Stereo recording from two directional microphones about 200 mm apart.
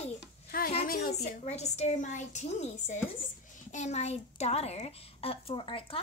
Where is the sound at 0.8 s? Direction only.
45° left (ahead or behind).